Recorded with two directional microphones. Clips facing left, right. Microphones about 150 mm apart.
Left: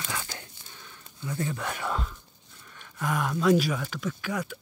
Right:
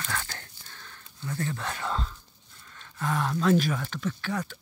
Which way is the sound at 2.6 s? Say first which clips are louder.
Even; 15° left (ahead or behind).